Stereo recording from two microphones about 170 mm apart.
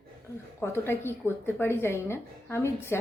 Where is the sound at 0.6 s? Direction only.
15° left (ahead or behind).